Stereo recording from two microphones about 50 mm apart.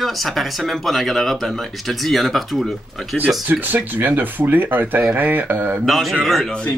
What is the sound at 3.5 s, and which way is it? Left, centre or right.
Speech, right.